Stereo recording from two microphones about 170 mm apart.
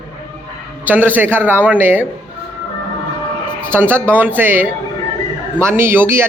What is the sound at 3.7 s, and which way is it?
Speech, 15° right (ahead or behind).